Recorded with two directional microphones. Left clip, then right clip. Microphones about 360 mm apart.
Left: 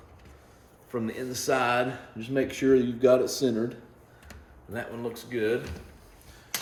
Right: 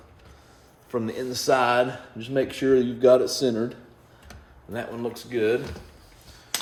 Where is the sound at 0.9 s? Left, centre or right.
Centre.